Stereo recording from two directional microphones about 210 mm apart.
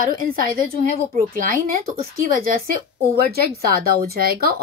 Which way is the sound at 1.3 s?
40° right (ahead or behind).